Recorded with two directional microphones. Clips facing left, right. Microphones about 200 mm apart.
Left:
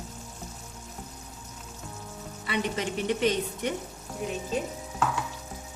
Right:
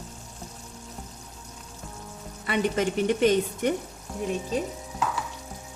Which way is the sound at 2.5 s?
50° right (ahead or behind).